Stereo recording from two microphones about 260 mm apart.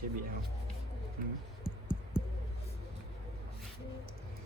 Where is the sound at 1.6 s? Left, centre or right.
Centre.